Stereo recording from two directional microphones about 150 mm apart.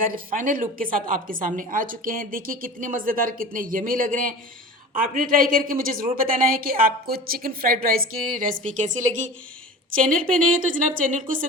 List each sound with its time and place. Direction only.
0.0 s a woman's voice: 70° right (ahead or behind)